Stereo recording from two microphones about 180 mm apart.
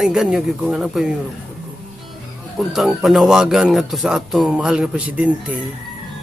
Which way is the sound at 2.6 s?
Centre (ahead or behind).